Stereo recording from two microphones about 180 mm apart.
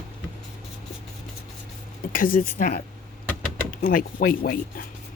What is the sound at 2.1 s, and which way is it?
Speech, 50° left (ahead or behind).